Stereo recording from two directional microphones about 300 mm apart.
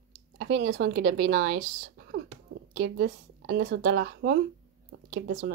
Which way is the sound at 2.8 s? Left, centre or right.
Right.